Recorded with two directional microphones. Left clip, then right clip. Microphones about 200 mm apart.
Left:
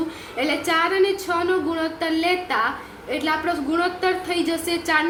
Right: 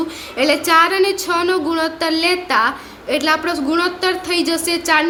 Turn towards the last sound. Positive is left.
turn(degrees=-30)  # may be behind; listen again after turning